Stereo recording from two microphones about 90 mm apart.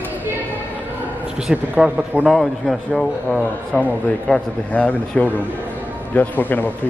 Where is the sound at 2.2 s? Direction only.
Centre (ahead or behind).